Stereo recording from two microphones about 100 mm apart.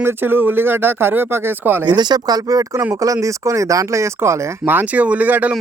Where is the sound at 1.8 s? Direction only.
45° right (ahead or behind).